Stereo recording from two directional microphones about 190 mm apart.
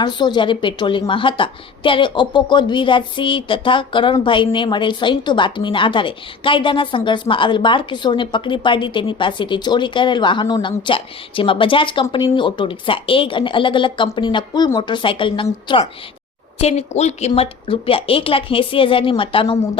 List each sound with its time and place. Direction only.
0.0 s a woman's voice: 20° left (ahead or behind)
16.6 s a woman's voice: 35° left (ahead or behind)